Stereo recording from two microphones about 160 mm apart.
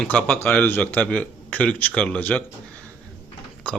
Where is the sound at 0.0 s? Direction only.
10° left (ahead or behind).